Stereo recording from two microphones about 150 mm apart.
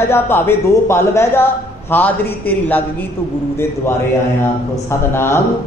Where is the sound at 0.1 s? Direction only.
15° left (ahead or behind).